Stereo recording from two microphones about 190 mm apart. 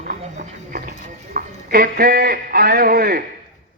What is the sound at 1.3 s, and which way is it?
A man's voice, 50° right (ahead or behind).